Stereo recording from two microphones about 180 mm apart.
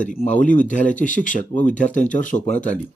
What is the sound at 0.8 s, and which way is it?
Speech, 5° left (ahead or behind).